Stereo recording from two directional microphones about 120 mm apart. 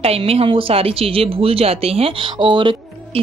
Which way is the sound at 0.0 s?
55° right (ahead or behind).